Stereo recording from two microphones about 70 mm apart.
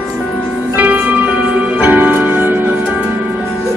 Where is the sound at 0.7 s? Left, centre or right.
Right.